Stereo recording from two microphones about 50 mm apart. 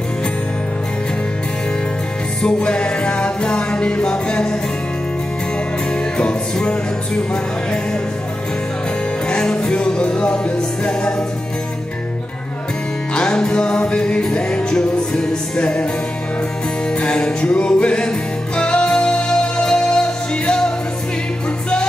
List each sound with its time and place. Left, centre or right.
2.4 s music: centre
5.9 s music: centre
9.3 s music: centre
13.1 s music: centre
16.9 s music: centre